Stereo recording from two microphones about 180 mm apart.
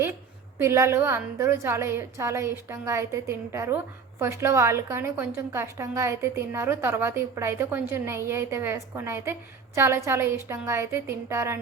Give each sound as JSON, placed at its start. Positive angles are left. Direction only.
{"t": 0.6, "sound": "a woman's voice", "side_deg": -15}